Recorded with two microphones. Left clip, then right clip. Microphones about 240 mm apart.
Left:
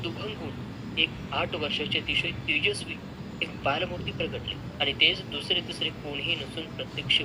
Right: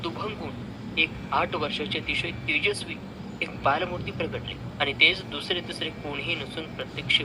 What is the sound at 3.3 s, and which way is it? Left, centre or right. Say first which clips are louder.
Speech: right 3 dB; centre.